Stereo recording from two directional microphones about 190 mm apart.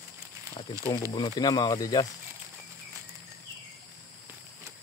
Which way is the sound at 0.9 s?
20° left (ahead or behind).